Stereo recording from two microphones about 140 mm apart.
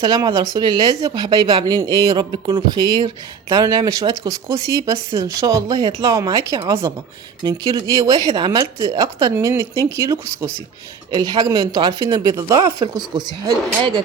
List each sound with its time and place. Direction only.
0.0 s speech: 30° right (ahead or behind)